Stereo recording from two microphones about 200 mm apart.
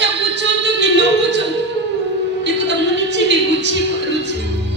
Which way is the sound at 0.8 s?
60° right (ahead or behind).